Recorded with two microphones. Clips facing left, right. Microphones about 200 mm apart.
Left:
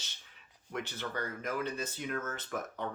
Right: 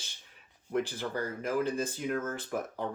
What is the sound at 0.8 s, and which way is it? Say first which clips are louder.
Speech: right 4 dB; 35° right (ahead or behind).